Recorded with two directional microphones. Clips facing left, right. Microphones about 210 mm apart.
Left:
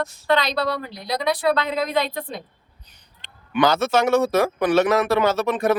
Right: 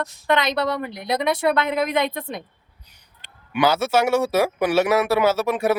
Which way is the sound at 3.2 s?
10° right (ahead or behind).